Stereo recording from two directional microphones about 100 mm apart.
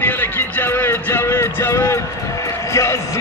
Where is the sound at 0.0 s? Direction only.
20° left (ahead or behind).